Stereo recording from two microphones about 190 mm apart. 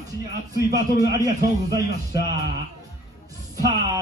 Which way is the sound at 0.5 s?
20° right (ahead or behind).